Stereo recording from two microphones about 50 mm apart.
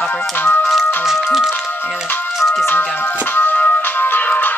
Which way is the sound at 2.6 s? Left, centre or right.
Left.